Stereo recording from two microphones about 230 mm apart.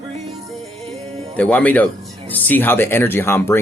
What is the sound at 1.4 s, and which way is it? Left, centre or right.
Speech, centre.